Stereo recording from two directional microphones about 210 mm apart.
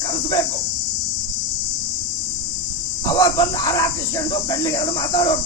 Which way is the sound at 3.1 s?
20° left (ahead or behind).